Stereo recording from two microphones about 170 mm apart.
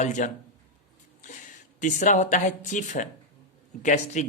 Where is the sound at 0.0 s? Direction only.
45° left (ahead or behind).